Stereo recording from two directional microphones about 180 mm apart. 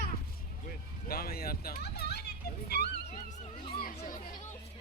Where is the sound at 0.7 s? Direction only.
55° left (ahead or behind).